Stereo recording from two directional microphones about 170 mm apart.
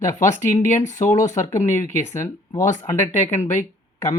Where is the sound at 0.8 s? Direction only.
20° left (ahead or behind).